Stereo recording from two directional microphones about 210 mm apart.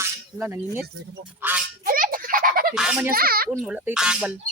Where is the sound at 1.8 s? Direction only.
40° right (ahead or behind).